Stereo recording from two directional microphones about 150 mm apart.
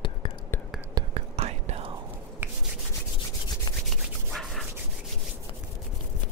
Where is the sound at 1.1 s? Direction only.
45° right (ahead or behind).